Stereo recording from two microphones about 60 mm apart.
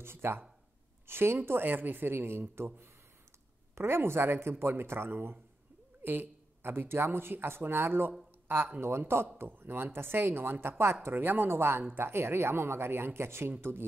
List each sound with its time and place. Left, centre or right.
0.0 s speech: right
8.8 s speech: right